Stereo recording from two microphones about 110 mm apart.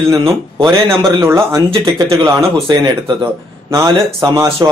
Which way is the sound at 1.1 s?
25° right (ahead or behind).